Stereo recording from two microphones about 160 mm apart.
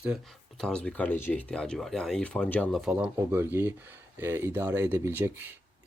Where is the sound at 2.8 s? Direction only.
5° right (ahead or behind).